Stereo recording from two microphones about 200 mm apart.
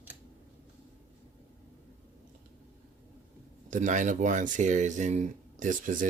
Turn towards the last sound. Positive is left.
turn(degrees=-40)  # may be behind; listen again after turning